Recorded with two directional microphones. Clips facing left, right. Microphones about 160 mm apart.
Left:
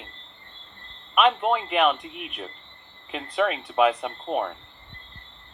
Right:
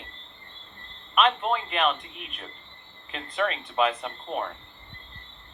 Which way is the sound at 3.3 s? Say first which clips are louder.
Left 4 dB; 65° left (ahead or behind).